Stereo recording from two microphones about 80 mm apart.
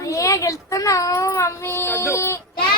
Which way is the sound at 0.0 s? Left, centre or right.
Left.